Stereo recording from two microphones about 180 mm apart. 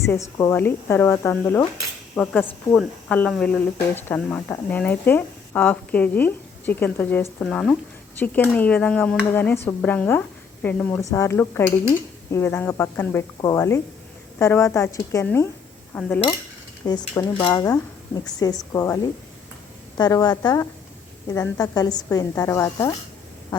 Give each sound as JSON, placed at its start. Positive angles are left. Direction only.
{"t": 0.0, "sound": "speech", "side_deg": 15}
{"t": 16.8, "sound": "a woman's voice", "side_deg": 20}